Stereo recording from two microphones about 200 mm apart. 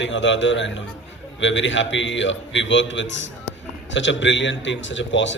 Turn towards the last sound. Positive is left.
turn(degrees=65)  # may be behind; listen again after turning